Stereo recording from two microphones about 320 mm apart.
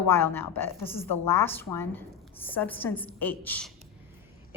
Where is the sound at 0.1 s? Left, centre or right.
Centre.